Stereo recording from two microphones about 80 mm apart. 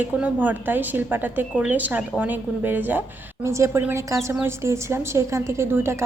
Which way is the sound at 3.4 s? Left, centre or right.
Right.